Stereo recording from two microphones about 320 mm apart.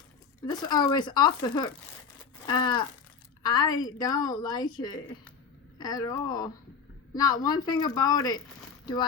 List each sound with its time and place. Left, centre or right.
0.4 s a woman's voice: centre